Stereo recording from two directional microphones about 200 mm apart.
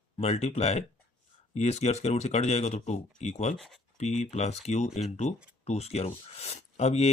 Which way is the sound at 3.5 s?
Centre (ahead or behind).